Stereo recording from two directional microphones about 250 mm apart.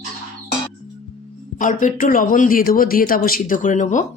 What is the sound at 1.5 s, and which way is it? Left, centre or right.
A woman's voice, left.